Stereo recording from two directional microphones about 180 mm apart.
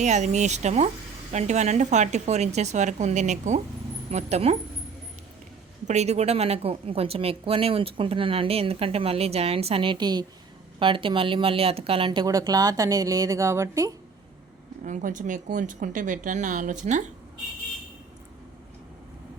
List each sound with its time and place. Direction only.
0.0 s a woman's voice: 40° right (ahead or behind)
5.9 s a woman's voice: 40° right (ahead or behind); by 13.9 s 15° right (ahead or behind)
14.8 s speech: 45° right (ahead or behind)